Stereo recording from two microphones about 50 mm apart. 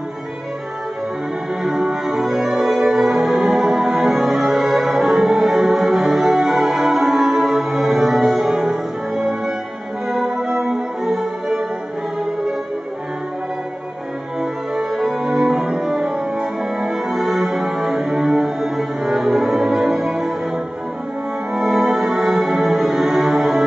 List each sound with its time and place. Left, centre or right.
1.6 s music: centre
8.5 s music: centre
10.3 s music: centre
14.4 s music: centre